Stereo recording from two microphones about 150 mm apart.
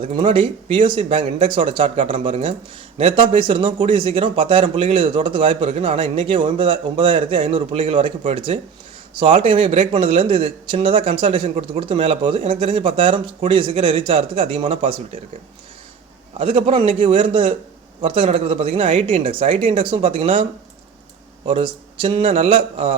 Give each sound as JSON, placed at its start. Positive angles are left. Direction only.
{"t": 0.0, "sound": "speech", "side_deg": -40}
{"t": 16.4, "sound": "speech", "side_deg": -35}